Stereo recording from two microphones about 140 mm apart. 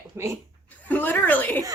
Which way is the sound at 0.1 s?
20° right (ahead or behind).